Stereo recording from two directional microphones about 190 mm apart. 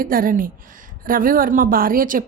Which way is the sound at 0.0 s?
50° right (ahead or behind).